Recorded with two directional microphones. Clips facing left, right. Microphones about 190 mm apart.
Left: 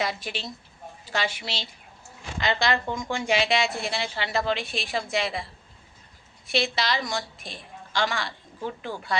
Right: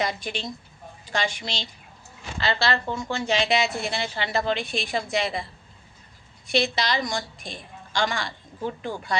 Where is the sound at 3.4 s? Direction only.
Centre (ahead or behind).